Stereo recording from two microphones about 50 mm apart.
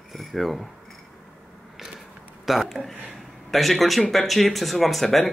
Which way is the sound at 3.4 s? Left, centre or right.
Centre.